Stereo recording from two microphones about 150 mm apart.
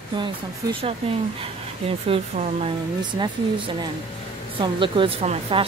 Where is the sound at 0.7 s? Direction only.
40° right (ahead or behind).